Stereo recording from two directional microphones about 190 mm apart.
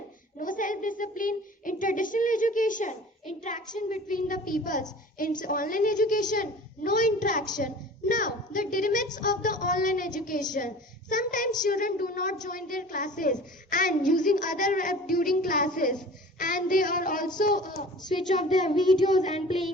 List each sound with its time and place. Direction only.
0.3 s child singing: 45° left (ahead or behind)
3.8 s a woman's voice: 45° left (ahead or behind)
18.3 s child singing: 40° left (ahead or behind)